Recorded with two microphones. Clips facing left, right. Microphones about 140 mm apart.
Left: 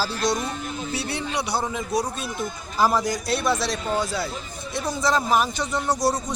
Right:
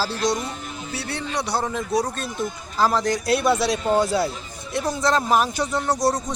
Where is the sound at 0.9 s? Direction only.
15° left (ahead or behind).